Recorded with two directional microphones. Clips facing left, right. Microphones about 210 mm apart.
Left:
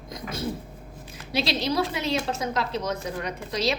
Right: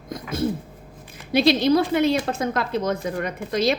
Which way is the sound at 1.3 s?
55° right (ahead or behind).